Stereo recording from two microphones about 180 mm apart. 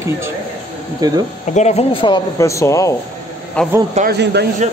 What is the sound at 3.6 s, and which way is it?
Speech, 5° left (ahead or behind).